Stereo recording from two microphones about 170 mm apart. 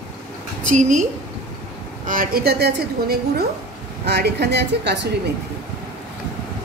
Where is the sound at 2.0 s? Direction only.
55° right (ahead or behind); by 5.1 s 85° right.